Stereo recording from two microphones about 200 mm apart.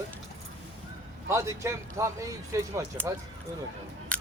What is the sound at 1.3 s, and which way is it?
Speech, 15° right (ahead or behind).